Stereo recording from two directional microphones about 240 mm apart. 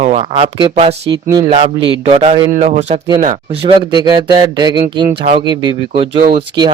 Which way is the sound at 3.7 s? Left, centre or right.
Centre.